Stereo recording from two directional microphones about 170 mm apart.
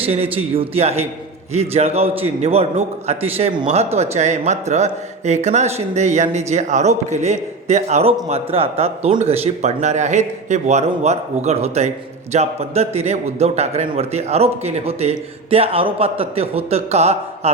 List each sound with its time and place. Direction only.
0.0 s speech: 35° right (ahead or behind)